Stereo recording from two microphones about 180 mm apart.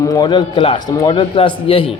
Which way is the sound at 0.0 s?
20° left (ahead or behind).